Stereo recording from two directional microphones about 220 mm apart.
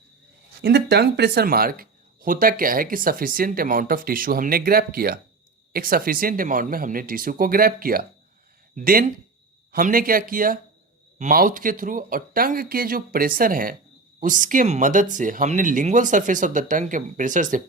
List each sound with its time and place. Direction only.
0.6 s speech: 45° right (ahead or behind)